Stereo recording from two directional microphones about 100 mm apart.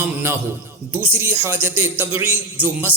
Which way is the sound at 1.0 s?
25° right (ahead or behind).